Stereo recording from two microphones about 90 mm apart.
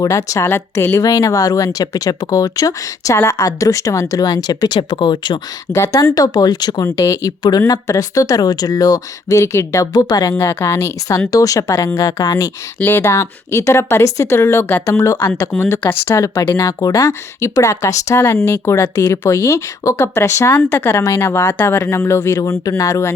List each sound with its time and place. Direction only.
0.0 s speech: 40° left (ahead or behind)
4.8 s speech: 60° left (ahead or behind)
5.7 s speech: 35° left (ahead or behind)
6.1 s speech: 45° left (ahead or behind)
6.9 s speech: 40° left (ahead or behind)
9.4 s speech: 30° left (ahead or behind)
10.3 s speech: 25° left (ahead or behind)
12.8 s speech: 25° left (ahead or behind)
13.1 s speech: 35° left (ahead or behind)
16.6 s speech: 40° left (ahead or behind)